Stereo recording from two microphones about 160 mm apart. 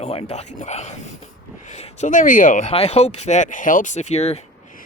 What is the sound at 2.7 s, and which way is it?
Speech, 40° left (ahead or behind).